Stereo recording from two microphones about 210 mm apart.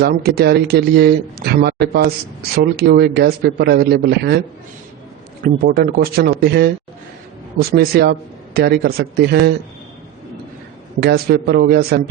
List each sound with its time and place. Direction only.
0.0 s speech: 50° right (ahead or behind)
5.4 s speech: 45° right (ahead or behind)
11.0 s speech: 50° right (ahead or behind)